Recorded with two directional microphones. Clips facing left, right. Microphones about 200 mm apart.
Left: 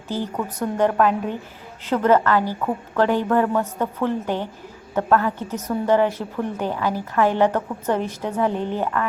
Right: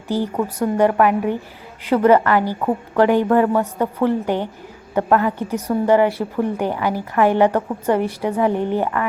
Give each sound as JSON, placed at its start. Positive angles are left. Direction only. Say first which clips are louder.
{"t": 0.1, "sound": "a woman's voice", "louder": "right 5 dB", "side_deg": -15}